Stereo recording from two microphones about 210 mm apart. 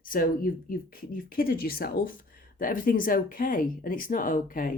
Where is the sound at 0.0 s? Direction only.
40° left (ahead or behind).